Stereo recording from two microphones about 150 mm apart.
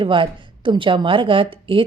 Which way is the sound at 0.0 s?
35° right (ahead or behind).